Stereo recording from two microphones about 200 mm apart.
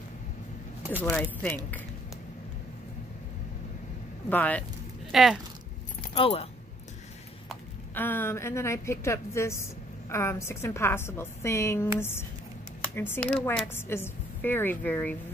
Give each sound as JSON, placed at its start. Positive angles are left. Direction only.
{"t": 1.0, "sound": "a woman's voice", "side_deg": 10}
{"t": 4.3, "sound": "a woman's voice", "side_deg": 10}
{"t": 5.1, "sound": "speech", "side_deg": 0}
{"t": 6.1, "sound": "speech", "side_deg": 30}
{"t": 7.9, "sound": "a woman's voice", "side_deg": 10}